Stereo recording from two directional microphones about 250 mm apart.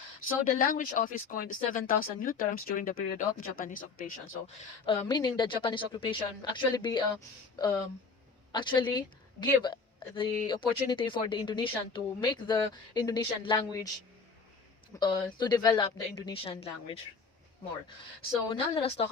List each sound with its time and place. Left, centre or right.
0.4 s speech: left
4.9 s speech: centre
14.9 s speech: centre
18.5 s speech: left